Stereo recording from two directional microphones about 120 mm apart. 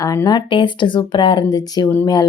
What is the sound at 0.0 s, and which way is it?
A woman's voice, 30° left (ahead or behind).